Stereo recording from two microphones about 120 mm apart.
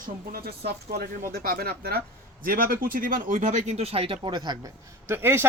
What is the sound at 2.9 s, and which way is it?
Speech, 90° right.